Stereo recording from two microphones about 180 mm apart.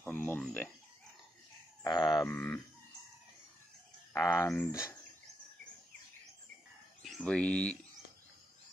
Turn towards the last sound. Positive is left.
turn(degrees=5)  # may be behind; listen again after turning